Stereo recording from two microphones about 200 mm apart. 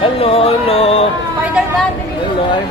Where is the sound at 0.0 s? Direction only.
30° left (ahead or behind).